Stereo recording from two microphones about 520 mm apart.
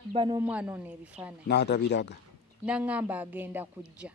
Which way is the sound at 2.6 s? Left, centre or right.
Centre.